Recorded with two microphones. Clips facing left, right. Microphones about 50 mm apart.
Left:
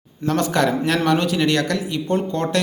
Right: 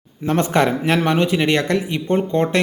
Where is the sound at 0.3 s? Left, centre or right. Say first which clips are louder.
Right 2 dB; right.